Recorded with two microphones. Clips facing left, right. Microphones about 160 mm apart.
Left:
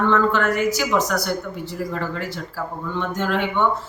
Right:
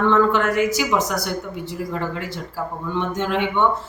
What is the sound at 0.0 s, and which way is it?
Speech, 20° right (ahead or behind).